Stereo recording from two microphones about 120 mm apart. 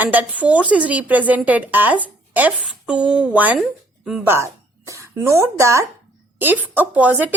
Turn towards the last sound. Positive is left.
turn(degrees=-15)  # may be behind; listen again after turning